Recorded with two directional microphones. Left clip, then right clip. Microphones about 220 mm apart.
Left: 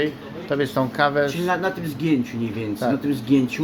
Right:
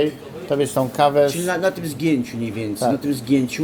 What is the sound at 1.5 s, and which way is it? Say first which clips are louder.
A man's voice: right 2 dB; 5° left (ahead or behind).